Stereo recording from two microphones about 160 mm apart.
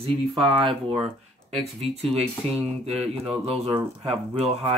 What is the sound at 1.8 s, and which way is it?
Speech, 40° right (ahead or behind).